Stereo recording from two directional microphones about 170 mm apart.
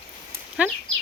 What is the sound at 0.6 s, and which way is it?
Speech, 5° right (ahead or behind).